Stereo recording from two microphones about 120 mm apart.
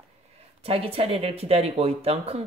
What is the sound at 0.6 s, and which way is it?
Speech, 55° right (ahead or behind).